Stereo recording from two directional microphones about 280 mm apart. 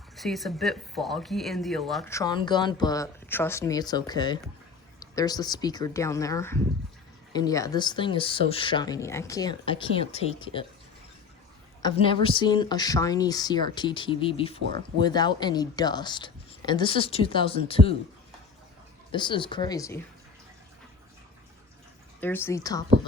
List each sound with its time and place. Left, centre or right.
0.2 s speech: centre
11.8 s speech: centre
14.6 s speech: right
15.0 s speech: centre
19.1 s speech: centre
22.2 s speech: centre